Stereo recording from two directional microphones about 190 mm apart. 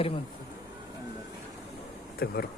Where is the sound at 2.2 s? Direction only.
55° left (ahead or behind).